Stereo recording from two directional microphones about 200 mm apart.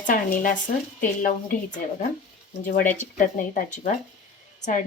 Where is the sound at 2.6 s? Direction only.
40° left (ahead or behind).